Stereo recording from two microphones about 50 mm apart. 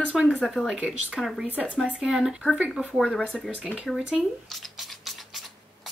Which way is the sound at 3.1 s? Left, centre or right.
Left.